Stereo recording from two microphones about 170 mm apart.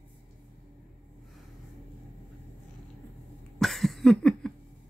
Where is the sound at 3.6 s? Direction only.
Centre (ahead or behind).